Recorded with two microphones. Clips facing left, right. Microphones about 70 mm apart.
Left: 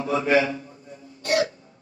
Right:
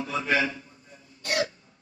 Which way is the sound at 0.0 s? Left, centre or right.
Left.